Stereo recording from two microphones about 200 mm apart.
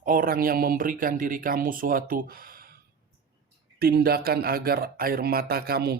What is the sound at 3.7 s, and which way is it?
Speech, 50° right (ahead or behind).